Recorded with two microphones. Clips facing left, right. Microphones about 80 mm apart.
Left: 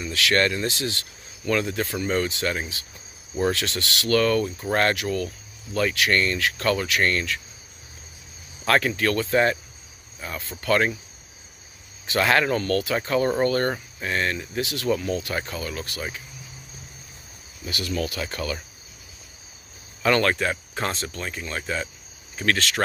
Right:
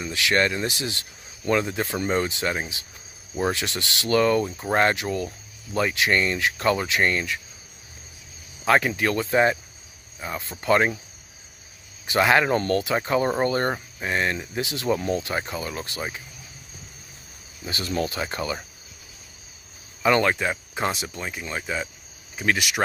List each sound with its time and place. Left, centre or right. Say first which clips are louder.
0.0 s speech: even; right
8.6 s speech: right 1 dB; centre
12.1 s speech: right 2 dB; centre
17.6 s speech: right 1 dB; right
20.0 s speech: right 1 dB; centre